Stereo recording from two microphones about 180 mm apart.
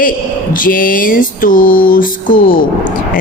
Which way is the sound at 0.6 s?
50° left (ahead or behind).